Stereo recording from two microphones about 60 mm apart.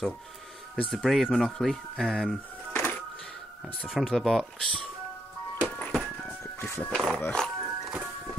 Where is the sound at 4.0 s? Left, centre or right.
Centre.